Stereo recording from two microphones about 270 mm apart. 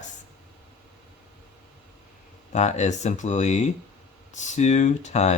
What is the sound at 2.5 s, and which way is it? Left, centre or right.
Speech, left.